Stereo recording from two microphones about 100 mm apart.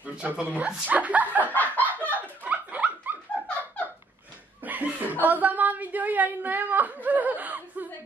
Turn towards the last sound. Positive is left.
turn(degrees=-15)  # may be behind; listen again after turning